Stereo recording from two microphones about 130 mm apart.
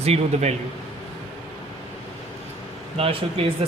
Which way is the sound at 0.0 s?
55° right (ahead or behind).